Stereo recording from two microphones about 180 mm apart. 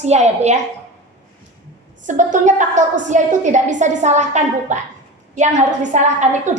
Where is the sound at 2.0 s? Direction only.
45° right (ahead or behind).